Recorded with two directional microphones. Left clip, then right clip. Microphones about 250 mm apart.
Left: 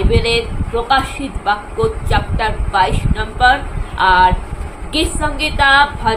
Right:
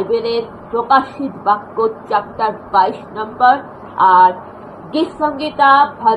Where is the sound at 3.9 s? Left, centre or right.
Centre.